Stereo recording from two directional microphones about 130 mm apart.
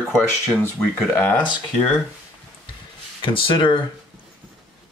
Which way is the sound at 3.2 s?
40° left (ahead or behind).